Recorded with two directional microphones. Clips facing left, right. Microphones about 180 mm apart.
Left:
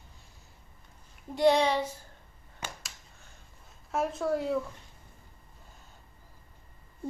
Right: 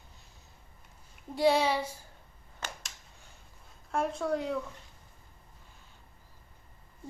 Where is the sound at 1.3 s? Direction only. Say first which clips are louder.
Left 2 dB; 5° right (ahead or behind).